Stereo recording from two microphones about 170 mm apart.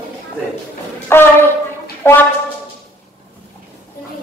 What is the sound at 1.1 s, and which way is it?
Speech, 15° left (ahead or behind).